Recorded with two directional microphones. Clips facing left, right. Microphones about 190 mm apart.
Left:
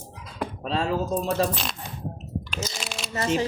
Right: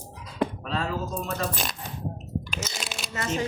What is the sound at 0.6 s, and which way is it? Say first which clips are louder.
Speech: left 4 dB; 30° left (ahead or behind).